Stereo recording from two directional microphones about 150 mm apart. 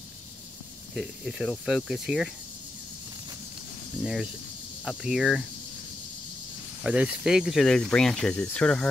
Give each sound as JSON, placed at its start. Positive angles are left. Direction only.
{"t": 0.9, "sound": "speech", "side_deg": -5}
{"t": 4.0, "sound": "speech", "side_deg": -5}
{"t": 6.8, "sound": "speech", "side_deg": -5}